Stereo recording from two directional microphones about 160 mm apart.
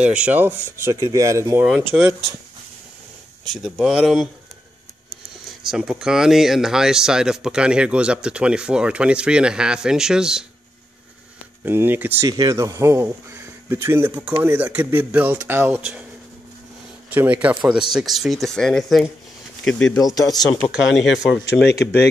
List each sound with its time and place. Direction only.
0.0 s speech: 5° right (ahead or behind)
1.8 s speech: 5° right (ahead or behind)
3.6 s speech: 5° right (ahead or behind)
5.6 s speech: 5° right (ahead or behind)
11.6 s speech: 15° right (ahead or behind)
12.3 s speech: 25° right (ahead or behind)
17.1 s speech: 10° right (ahead or behind)
21.5 s speech: 90° left